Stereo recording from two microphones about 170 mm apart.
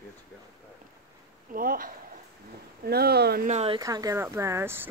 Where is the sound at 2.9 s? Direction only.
65° right (ahead or behind).